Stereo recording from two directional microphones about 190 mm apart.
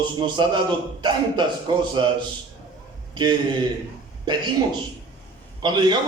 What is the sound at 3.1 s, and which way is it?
A man's voice, 25° right (ahead or behind).